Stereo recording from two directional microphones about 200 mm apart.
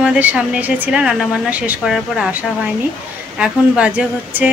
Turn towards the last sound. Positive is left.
turn(degrees=-10)  # may be behind; listen again after turning